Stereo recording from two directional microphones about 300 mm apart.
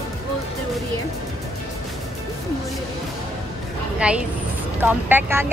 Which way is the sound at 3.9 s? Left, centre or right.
Centre.